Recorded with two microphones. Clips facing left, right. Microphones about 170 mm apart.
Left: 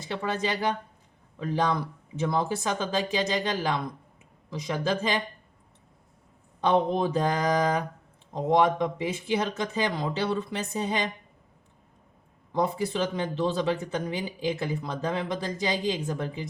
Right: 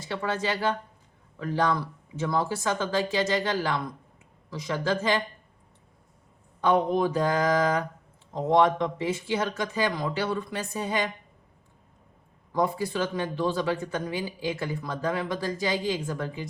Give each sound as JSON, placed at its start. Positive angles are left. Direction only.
{"t": 0.0, "sound": "speech", "side_deg": 20}
{"t": 6.6, "sound": "speech", "side_deg": 25}
{"t": 12.5, "sound": "speech", "side_deg": 20}